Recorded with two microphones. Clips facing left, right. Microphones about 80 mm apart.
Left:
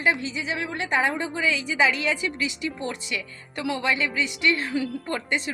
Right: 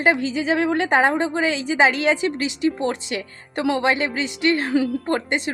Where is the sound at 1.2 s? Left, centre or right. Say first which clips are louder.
Right 5 dB; right.